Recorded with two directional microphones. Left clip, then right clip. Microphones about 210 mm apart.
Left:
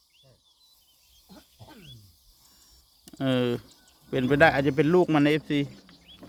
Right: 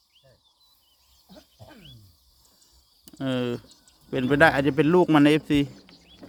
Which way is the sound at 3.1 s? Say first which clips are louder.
Left 2 dB; 15° left (ahead or behind).